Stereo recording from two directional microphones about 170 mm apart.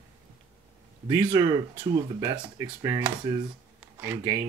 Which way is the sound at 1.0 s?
20° right (ahead or behind).